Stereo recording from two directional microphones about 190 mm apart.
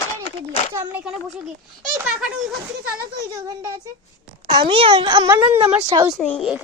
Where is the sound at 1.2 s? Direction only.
Centre (ahead or behind).